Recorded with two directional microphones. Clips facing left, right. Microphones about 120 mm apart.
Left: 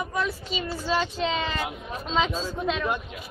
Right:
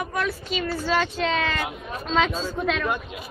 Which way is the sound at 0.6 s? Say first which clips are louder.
Right 3 dB; 15° left (ahead or behind).